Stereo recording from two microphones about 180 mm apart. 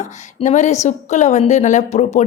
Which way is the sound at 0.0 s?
40° left (ahead or behind).